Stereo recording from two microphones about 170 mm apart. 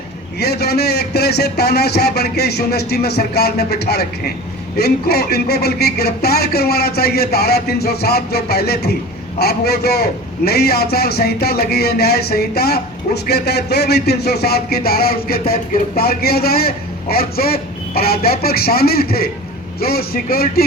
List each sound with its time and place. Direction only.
0.3 s speech: 70° left (ahead or behind)
13.2 s music: 75° left (ahead or behind)